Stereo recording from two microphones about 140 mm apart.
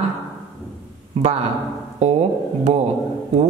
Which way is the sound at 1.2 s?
50° right (ahead or behind).